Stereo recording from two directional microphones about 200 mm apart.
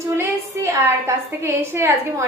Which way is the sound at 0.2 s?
15° right (ahead or behind).